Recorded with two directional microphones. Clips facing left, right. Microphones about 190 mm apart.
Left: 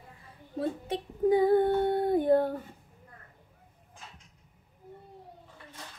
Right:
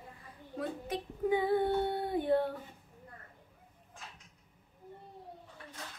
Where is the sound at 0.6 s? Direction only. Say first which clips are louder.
Left 5 dB; 35° left (ahead or behind).